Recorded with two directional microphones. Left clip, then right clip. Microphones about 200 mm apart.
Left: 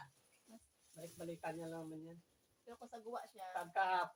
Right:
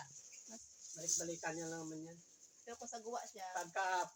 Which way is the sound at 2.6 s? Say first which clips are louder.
Right 3 dB; 35° right (ahead or behind).